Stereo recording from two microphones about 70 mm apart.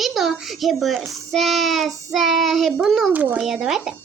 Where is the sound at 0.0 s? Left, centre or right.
Centre.